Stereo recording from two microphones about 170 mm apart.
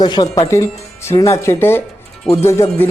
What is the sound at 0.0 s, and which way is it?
A woman's voice, 25° left (ahead or behind).